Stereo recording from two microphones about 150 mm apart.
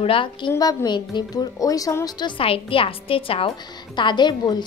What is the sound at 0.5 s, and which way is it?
A woman's voice, 25° left (ahead or behind).